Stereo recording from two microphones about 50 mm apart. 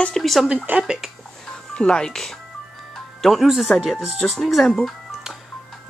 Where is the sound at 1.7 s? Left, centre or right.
Centre.